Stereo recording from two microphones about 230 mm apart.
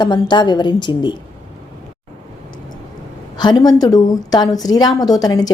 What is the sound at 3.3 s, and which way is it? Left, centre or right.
A woman's voice, centre.